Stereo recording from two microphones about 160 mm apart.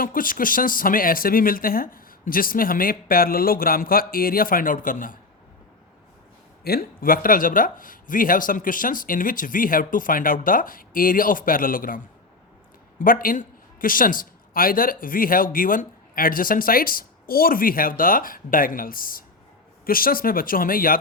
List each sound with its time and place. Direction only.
0.0 s a man's voice: 60° left (ahead or behind)
6.7 s a man's voice: 65° left (ahead or behind)
13.0 s a man's voice: 60° left (ahead or behind)